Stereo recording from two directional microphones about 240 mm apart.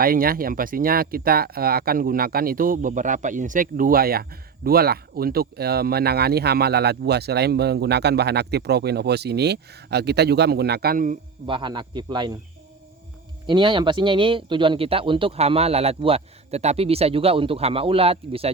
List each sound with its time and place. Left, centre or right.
0.0 s speech: right
11.4 s speech: centre
13.5 s speech: centre